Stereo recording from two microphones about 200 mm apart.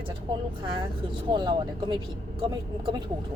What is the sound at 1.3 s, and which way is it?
Speech, 25° right (ahead or behind).